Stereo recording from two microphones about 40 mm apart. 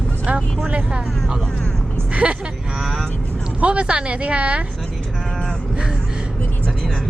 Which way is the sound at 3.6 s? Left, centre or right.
Right.